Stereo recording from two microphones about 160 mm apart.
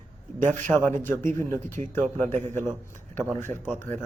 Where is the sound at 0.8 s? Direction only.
15° left (ahead or behind).